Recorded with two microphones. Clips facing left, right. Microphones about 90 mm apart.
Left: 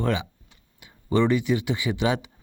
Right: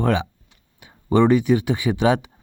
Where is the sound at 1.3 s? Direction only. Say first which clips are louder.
Right 5 dB; 45° right (ahead or behind).